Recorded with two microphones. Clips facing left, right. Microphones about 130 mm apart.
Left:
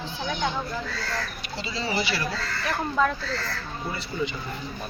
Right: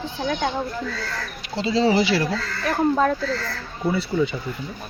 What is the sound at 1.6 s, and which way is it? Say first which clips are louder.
Speech: right 10 dB; 90° right.